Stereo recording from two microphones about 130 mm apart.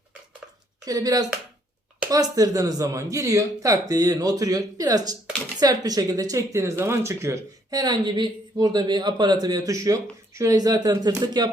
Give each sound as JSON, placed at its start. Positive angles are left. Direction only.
{"t": 0.9, "sound": "speech", "side_deg": -30}